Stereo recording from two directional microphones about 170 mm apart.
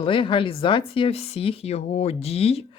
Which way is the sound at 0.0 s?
30° left (ahead or behind).